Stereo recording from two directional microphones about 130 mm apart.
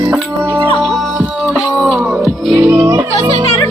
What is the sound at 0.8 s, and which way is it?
Music, 5° left (ahead or behind).